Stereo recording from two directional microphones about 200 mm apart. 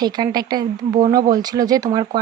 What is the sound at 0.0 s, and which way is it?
Speech, 20° right (ahead or behind).